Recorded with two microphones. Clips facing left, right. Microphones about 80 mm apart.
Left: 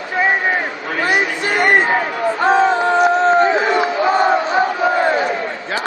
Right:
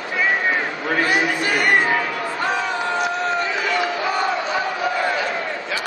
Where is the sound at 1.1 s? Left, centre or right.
Left.